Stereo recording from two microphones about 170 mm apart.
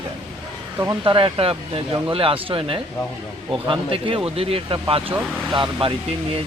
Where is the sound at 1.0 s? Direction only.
30° right (ahead or behind).